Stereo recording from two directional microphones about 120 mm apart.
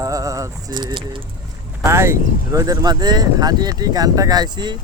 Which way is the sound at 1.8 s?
20° right (ahead or behind).